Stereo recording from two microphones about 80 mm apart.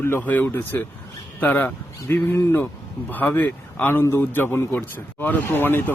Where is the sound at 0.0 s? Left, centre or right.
Left.